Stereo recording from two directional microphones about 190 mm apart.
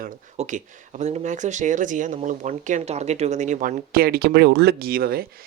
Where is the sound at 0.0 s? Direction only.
40° right (ahead or behind).